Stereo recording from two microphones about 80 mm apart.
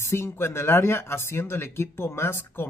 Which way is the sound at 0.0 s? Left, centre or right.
Left.